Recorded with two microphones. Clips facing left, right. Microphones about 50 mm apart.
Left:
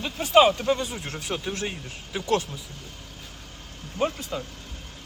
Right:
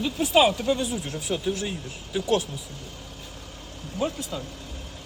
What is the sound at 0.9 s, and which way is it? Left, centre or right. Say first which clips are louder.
Speech: right 3 dB; left.